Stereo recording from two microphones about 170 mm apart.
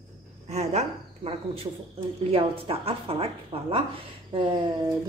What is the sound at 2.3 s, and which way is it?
A woman's voice, 35° right (ahead or behind).